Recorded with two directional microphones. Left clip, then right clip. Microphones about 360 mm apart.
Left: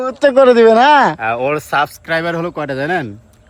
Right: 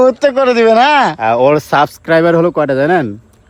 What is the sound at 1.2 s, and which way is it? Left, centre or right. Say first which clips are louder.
Speech: right 7 dB; right.